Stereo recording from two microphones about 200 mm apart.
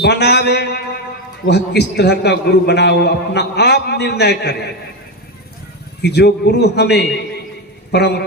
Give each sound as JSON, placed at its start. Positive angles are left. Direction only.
{"t": 0.0, "sound": "a man's voice", "side_deg": 55}
{"t": 6.0, "sound": "a man's voice", "side_deg": 55}